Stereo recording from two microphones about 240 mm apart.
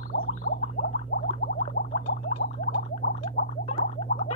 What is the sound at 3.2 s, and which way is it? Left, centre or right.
Gargling, left.